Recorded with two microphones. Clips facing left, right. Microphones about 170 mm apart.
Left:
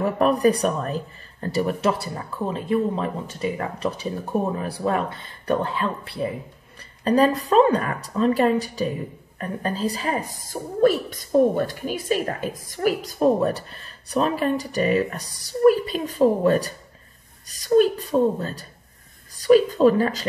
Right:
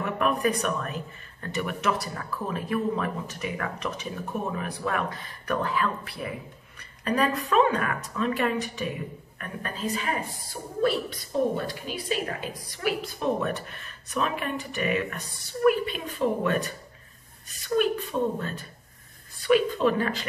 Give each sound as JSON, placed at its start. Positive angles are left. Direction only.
{"t": 0.0, "sound": "a woman's voice", "side_deg": 35}